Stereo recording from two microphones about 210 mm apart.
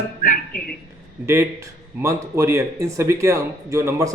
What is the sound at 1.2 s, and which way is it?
Speech, 15° right (ahead or behind).